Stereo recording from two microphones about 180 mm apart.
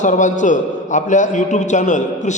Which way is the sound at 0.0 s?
45° left (ahead or behind).